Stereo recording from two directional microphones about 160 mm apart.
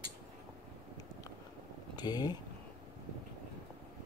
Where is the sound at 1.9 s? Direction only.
25° left (ahead or behind).